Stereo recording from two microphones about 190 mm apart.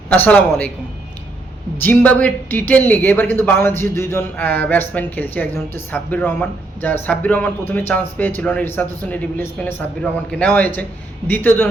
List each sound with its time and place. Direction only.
0.1 s speech: 10° left (ahead or behind)
1.8 s speech: 10° left (ahead or behind)